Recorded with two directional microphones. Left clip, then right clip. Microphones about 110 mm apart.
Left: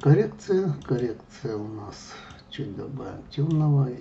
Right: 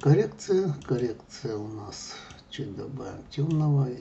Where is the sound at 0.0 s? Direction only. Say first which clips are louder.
Left 2 dB; 15° right (ahead or behind).